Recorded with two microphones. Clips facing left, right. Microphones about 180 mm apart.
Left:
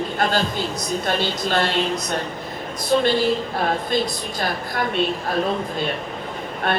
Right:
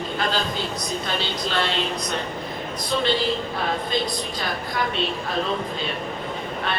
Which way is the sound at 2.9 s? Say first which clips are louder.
Left 6 dB; 50° left (ahead or behind).